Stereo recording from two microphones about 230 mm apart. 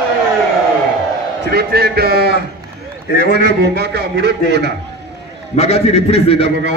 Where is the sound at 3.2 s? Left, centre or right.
Left.